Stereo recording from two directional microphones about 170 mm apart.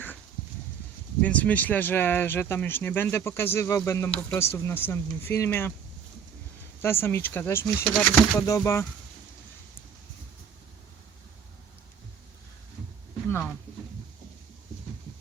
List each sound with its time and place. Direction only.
1.2 s speech: 10° left (ahead or behind)
6.8 s speech: 15° left (ahead or behind)